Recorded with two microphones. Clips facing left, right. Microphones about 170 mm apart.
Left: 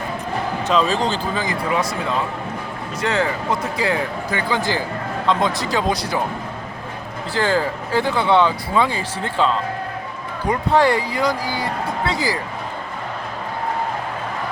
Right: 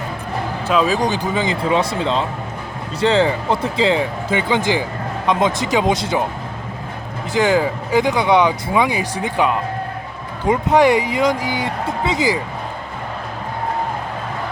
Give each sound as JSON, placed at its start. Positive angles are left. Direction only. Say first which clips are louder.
{"t": 0.7, "sound": "speech", "louder": "right 2 dB", "side_deg": -10}
{"t": 7.3, "sound": "speech", "louder": "right 4 dB", "side_deg": -15}